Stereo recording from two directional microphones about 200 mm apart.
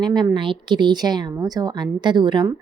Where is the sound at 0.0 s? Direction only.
20° right (ahead or behind).